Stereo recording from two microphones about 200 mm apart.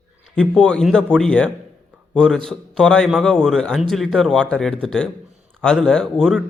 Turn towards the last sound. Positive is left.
turn(degrees=5)  # may be behind; listen again after turning